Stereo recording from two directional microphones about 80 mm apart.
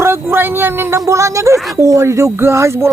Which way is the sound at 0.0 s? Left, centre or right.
Right.